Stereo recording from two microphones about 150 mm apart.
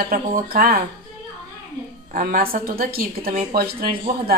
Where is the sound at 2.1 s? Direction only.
70° right (ahead or behind).